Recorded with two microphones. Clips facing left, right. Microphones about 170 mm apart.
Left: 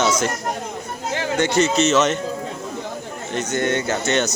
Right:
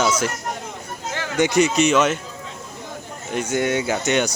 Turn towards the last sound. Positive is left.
turn(degrees=-10)  # may be behind; listen again after turning